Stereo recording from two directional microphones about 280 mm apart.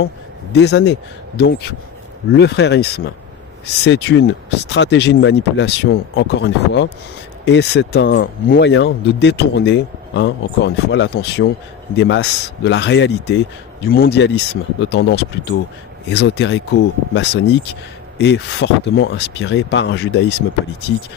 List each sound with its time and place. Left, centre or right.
0.5 s speech: left